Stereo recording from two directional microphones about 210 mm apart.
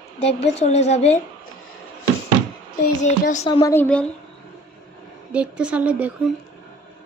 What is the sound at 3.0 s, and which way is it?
Speech, 35° left (ahead or behind).